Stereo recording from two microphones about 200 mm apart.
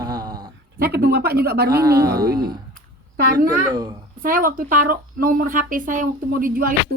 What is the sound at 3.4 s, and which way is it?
Speech, 20° right (ahead or behind).